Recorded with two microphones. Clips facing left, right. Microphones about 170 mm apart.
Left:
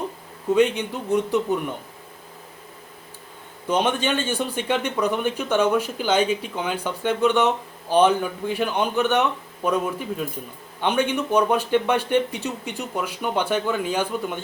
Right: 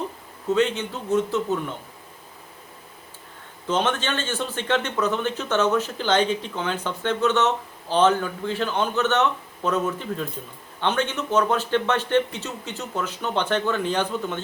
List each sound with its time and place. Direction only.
0.5 s speech: 15° left (ahead or behind)
3.7 s speech: 15° left (ahead or behind)